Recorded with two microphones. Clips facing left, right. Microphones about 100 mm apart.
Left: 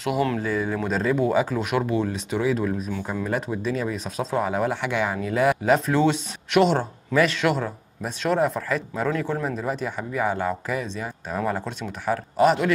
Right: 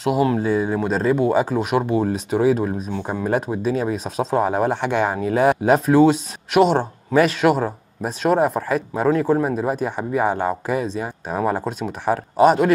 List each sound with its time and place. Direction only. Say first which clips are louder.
0.3 s speech: right 5 dB; 25° right (ahead or behind)
1.0 s speech: right 3 dB; centre (ahead or behind)
1.4 s speech: right 4 dB; 30° right (ahead or behind)
6.8 s speech: right 4 dB; 30° right (ahead or behind)